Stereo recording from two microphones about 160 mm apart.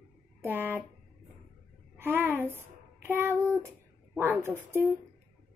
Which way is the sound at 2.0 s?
15° right (ahead or behind).